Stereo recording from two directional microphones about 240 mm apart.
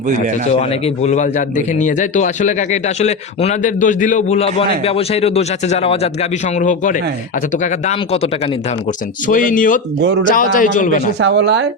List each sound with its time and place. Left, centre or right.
0.6 s a man's voice: left
11.2 s a woman's voice: right